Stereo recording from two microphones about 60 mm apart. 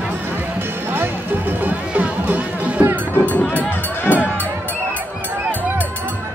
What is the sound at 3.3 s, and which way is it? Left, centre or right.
Music, left.